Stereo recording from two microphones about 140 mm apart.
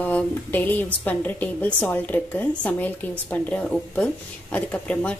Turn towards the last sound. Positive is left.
turn(degrees=10)  # may be behind; listen again after turning